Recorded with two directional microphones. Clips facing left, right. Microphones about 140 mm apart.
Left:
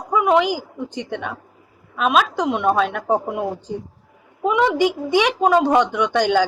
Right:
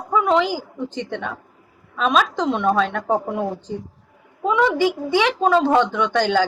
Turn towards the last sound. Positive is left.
turn(degrees=15)  # may be behind; listen again after turning